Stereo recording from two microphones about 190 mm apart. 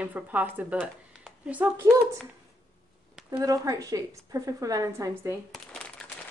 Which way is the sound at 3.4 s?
20° right (ahead or behind).